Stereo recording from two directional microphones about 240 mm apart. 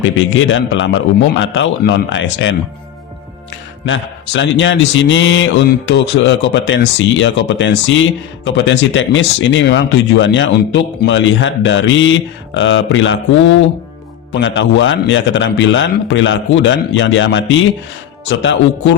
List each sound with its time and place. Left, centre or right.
0.0 s speech: left
3.8 s speech: left